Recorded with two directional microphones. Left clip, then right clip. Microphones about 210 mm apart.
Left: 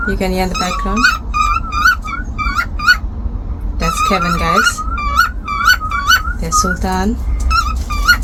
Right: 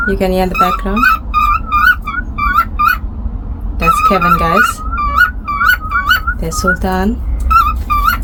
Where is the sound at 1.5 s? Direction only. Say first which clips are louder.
Right 3 dB; 20° right (ahead or behind).